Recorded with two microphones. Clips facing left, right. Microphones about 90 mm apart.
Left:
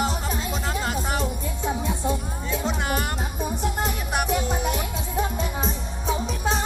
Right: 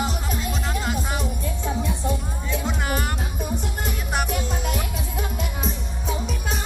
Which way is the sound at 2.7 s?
30° left (ahead or behind).